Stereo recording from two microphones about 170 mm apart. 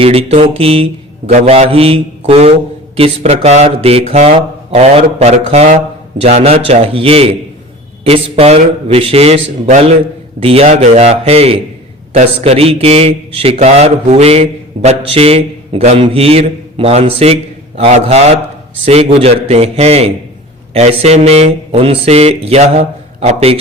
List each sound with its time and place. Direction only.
0.0 s speech: 35° right (ahead or behind)